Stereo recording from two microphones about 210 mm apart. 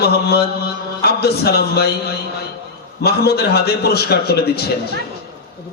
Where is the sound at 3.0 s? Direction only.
50° left (ahead or behind).